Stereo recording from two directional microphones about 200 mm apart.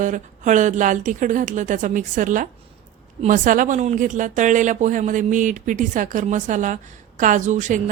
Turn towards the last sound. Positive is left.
turn(degrees=-40)  # may be behind; listen again after turning